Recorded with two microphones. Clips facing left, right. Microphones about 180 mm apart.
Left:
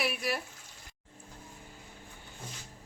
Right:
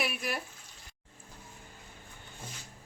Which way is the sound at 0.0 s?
Centre (ahead or behind).